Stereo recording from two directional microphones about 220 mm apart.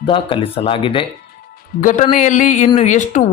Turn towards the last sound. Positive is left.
turn(degrees=35)  # may be behind; listen again after turning